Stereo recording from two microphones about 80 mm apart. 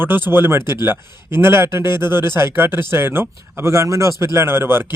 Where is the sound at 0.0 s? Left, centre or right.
Right.